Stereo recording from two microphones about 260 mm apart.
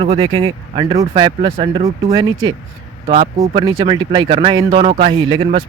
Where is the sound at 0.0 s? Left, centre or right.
Right.